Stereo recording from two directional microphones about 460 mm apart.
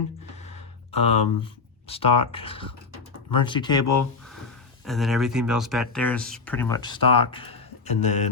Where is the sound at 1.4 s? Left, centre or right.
Centre.